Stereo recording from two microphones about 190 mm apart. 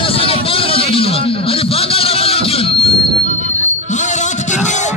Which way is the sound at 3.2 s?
35° right (ahead or behind).